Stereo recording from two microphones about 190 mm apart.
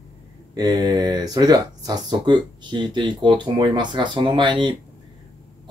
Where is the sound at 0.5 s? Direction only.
20° right (ahead or behind).